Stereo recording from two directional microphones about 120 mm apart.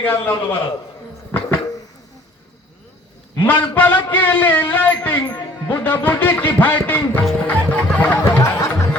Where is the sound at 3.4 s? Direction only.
15° left (ahead or behind).